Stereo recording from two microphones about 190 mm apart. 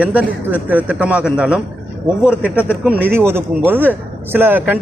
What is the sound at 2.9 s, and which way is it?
A man's voice, 10° right (ahead or behind).